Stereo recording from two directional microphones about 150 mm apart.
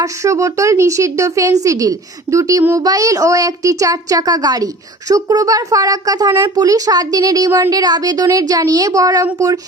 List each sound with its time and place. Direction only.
0.0 s speech: 20° right (ahead or behind)